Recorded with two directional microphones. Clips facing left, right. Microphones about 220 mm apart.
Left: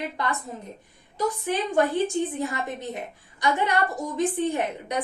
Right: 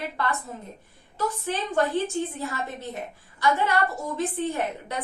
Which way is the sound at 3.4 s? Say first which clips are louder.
Even; 15° left (ahead or behind).